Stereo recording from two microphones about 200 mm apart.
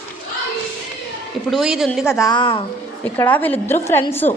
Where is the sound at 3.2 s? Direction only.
10° left (ahead or behind).